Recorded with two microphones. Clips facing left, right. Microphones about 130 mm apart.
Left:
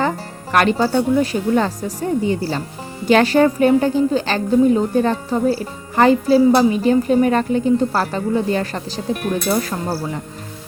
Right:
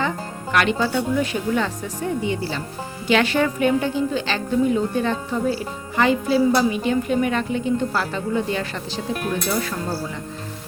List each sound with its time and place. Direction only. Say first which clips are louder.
0.5 s a woman's voice: left 5 dB; 40° left (ahead or behind)